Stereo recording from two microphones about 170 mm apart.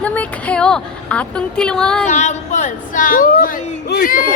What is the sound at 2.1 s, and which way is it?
Speech, 45° left (ahead or behind).